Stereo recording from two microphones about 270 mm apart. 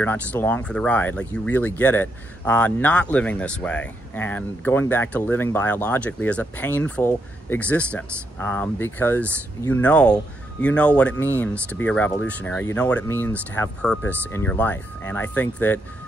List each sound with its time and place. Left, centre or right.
0.0 s speech: centre